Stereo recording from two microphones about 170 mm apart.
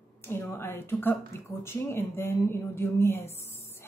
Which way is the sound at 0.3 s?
15° left (ahead or behind).